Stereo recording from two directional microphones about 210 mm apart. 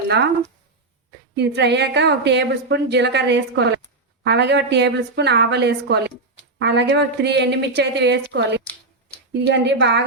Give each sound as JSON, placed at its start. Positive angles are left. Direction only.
{"t": 1.4, "sound": "a woman's voice", "side_deg": -55}